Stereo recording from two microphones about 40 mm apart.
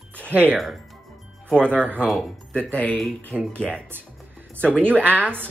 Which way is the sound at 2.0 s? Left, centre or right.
Centre.